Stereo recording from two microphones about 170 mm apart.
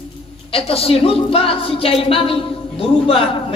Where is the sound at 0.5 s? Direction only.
35° left (ahead or behind).